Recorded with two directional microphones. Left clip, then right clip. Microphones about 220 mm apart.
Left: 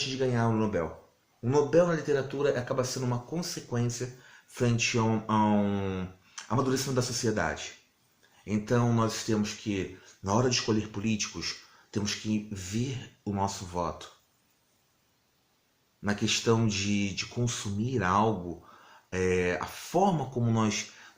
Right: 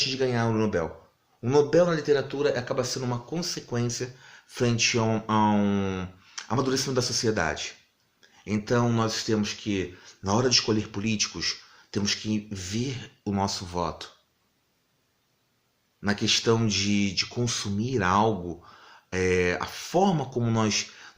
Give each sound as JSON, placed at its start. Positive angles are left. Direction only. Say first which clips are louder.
{"t": 0.0, "sound": "speech", "louder": "right 3 dB", "side_deg": -35}
{"t": 16.0, "sound": "speech", "louder": "right 5 dB", "side_deg": -30}